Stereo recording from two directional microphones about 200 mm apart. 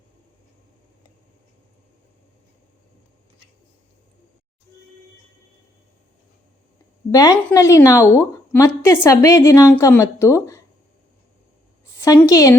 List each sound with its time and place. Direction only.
7.1 s a woman's voice: 15° left (ahead or behind)
12.2 s a woman's voice: 15° left (ahead or behind)